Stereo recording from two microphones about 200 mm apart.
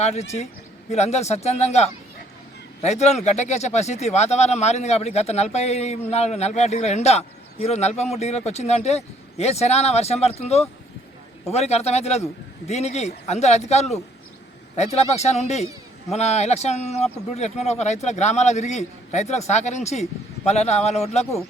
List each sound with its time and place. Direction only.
0.0 s speech: 35° left (ahead or behind)